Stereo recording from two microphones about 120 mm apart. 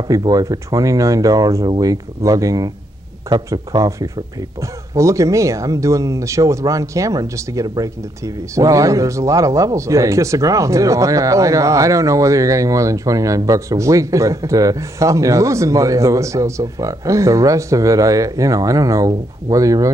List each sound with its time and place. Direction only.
0.1 s speech: 30° right (ahead or behind)